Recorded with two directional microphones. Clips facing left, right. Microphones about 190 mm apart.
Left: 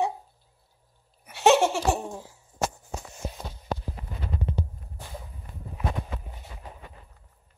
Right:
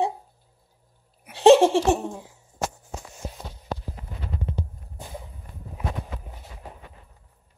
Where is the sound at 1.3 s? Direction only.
30° right (ahead or behind).